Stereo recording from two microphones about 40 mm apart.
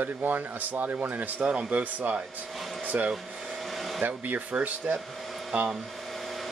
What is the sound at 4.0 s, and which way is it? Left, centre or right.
Speech, right.